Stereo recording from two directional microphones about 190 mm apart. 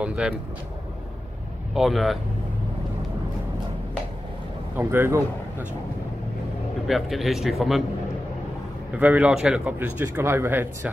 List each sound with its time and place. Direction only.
0.0 s speech: 5° right (ahead or behind)
1.7 s speech: centre (ahead or behind)
4.7 s speech: 10° right (ahead or behind)
6.9 s speech: centre (ahead or behind)
8.9 s speech: 10° right (ahead or behind)